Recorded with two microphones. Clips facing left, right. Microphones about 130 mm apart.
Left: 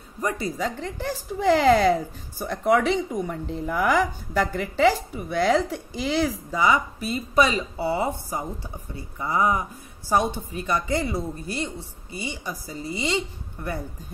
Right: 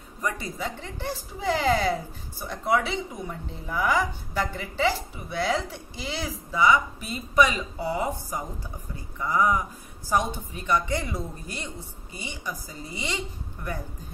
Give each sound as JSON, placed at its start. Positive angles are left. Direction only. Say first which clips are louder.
{"t": 0.2, "sound": "a woman's voice", "louder": "left 4 dB", "side_deg": 35}
{"t": 12.3, "sound": "speech", "louder": "left 1 dB", "side_deg": 30}